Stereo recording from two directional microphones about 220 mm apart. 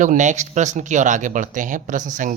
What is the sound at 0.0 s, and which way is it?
A woman's voice, 35° right (ahead or behind).